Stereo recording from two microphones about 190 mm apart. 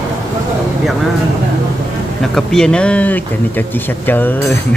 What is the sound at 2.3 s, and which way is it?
Speech, 5° left (ahead or behind).